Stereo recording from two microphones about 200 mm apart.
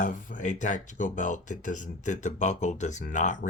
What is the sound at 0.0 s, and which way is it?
Speech, 40° left (ahead or behind).